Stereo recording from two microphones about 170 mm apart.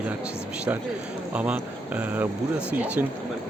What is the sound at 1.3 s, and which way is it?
Speech, 5° right (ahead or behind).